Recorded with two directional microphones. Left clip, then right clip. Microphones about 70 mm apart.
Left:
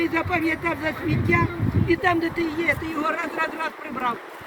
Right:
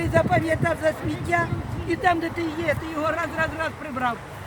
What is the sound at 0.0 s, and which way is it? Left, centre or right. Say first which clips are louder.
Speech: right 2 dB; right.